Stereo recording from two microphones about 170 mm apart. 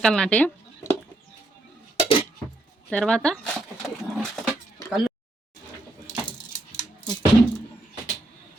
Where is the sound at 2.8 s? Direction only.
5° left (ahead or behind).